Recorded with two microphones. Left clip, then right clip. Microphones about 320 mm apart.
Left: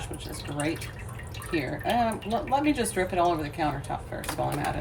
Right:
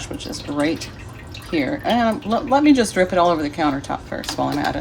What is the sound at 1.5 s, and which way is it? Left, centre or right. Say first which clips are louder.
Speech: right 7 dB; right.